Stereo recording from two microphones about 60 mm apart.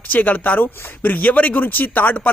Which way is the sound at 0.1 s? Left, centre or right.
Left.